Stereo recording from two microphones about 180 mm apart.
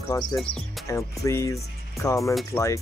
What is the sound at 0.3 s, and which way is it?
Speech, 20° left (ahead or behind).